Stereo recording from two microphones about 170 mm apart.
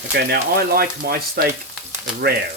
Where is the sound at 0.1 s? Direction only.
65° right (ahead or behind).